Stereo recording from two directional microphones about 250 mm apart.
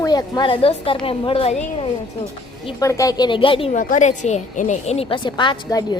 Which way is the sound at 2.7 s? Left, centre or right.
Centre.